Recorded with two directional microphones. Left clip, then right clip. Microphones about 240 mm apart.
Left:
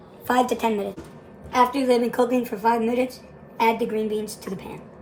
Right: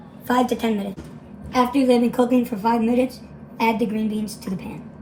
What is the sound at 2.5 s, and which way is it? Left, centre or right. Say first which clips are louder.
Speech: even; left.